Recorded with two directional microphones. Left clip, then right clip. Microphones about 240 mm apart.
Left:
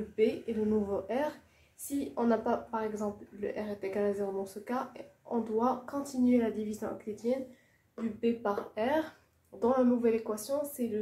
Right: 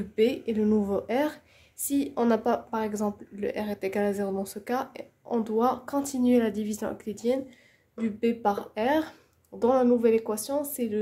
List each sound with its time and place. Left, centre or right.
0.1 s speech: right